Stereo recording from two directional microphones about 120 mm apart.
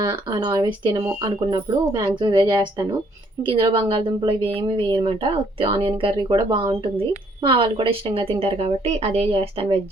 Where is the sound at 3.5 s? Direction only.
50° right (ahead or behind).